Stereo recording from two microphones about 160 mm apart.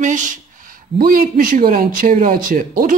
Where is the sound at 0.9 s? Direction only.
65° right (ahead or behind).